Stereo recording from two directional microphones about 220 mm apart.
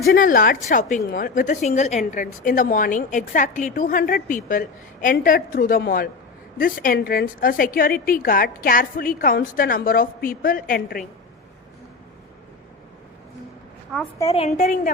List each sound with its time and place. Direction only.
0.1 s a woman's voice: 40° left (ahead or behind)
13.9 s a woman's voice: centre (ahead or behind)
14.3 s a woman's voice: 30° left (ahead or behind)